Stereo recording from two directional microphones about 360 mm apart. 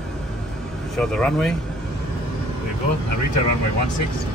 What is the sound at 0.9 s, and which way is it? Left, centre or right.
Speech, centre.